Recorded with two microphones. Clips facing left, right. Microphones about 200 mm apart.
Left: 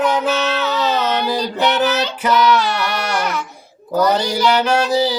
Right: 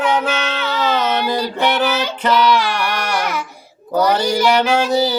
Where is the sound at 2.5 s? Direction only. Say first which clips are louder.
Even; 10° right (ahead or behind).